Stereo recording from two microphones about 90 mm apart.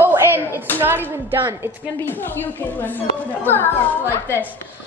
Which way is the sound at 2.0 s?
25° left (ahead or behind).